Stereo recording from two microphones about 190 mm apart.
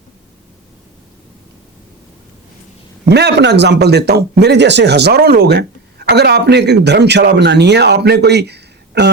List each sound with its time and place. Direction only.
3.1 s a man's voice: 60° right (ahead or behind)